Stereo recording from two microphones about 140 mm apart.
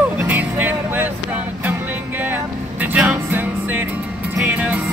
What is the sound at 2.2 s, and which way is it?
Music, 15° right (ahead or behind).